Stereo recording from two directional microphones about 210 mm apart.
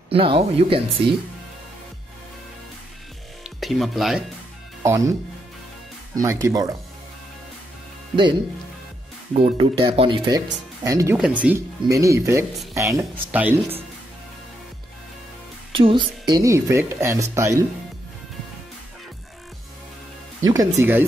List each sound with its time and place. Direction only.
0.1 s speech: 25° right (ahead or behind)
3.4 s speech: centre (ahead or behind)
4.8 s speech: 15° right (ahead or behind)
6.2 s a woman's voice: 15° right (ahead or behind)
9.3 s a woman's voice: 25° right (ahead or behind); by 13.7 s 10° right (ahead or behind)
15.7 s a woman's voice: 25° right (ahead or behind)
20.3 s a woman's voice: 15° right (ahead or behind)